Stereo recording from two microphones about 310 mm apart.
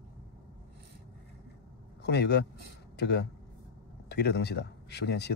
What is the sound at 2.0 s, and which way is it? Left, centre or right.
Speech, left.